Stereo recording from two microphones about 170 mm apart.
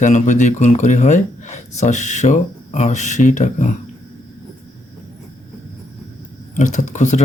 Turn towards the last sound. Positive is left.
turn(degrees=45)  # may be behind; listen again after turning